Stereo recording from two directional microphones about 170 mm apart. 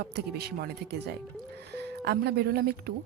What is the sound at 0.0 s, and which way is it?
A woman's voice, 70° right (ahead or behind).